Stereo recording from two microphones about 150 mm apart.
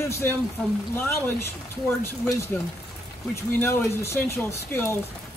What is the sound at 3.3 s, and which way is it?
Speech, 15° left (ahead or behind).